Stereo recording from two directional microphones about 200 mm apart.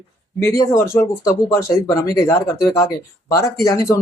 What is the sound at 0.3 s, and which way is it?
Speech, 15° left (ahead or behind).